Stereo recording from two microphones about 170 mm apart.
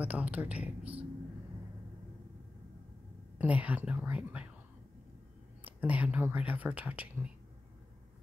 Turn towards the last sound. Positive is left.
turn(degrees=-10)  # may be behind; listen again after turning